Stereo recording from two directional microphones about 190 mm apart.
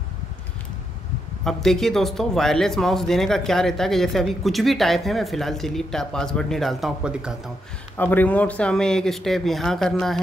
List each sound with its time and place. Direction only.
1.4 s a man's voice: centre (ahead or behind)
8.0 s a man's voice: 10° left (ahead or behind)